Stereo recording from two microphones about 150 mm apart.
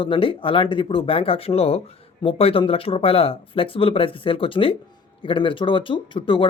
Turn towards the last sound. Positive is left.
turn(degrees=35)  # may be behind; listen again after turning